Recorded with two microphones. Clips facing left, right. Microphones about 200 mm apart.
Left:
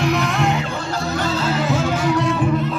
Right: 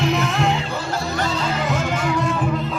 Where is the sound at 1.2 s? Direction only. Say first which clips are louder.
Left 3 dB; 5° left (ahead or behind).